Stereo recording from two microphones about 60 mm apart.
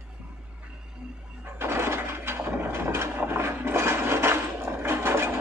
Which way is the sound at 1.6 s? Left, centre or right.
Right.